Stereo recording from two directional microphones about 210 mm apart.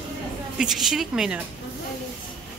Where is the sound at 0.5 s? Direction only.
Centre (ahead or behind).